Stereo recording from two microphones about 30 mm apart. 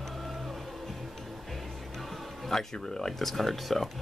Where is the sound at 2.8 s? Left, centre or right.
Centre.